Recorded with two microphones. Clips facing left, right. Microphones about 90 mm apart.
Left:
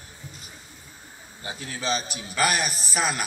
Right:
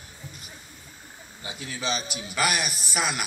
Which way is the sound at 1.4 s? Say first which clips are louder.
Left 2 dB; 40° left (ahead or behind).